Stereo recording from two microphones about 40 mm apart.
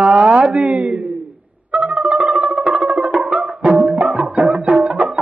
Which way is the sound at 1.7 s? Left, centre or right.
Right.